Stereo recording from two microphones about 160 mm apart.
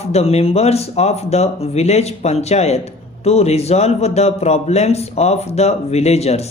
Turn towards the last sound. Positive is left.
turn(degrees=40)  # may be behind; listen again after turning